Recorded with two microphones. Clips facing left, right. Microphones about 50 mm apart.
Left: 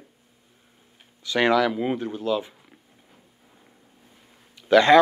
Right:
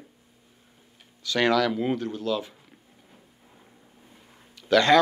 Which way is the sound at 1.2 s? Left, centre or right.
Left.